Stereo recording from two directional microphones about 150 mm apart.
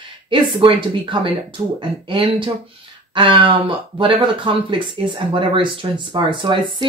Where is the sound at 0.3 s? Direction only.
35° right (ahead or behind).